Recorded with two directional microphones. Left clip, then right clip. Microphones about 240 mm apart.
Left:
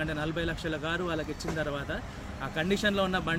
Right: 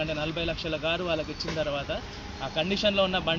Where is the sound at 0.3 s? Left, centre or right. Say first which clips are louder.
Right 2 dB; left.